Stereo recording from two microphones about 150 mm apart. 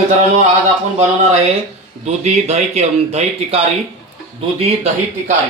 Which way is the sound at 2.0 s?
50° right (ahead or behind).